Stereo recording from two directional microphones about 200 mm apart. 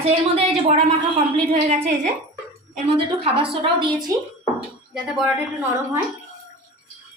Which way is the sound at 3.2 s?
25° right (ahead or behind).